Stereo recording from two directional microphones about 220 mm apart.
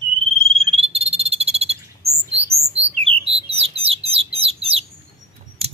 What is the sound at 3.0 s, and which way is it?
Bird, 25° right (ahead or behind).